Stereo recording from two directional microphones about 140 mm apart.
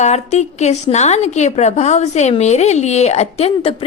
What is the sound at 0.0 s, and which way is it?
A woman's voice, 55° left (ahead or behind).